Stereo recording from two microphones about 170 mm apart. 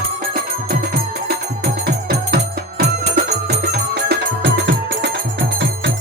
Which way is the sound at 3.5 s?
75° right (ahead or behind).